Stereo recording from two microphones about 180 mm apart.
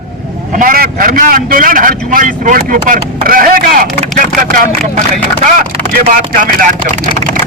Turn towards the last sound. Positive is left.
turn(degrees=-45)  # may be behind; listen again after turning